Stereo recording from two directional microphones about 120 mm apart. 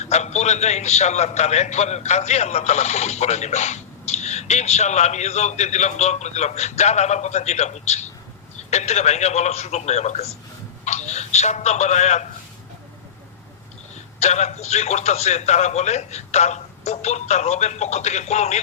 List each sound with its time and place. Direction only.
0.0 s a man's voice: 70° left (ahead or behind)
10.8 s telephone: 70° left (ahead or behind)
14.2 s a man's voice: 70° left (ahead or behind)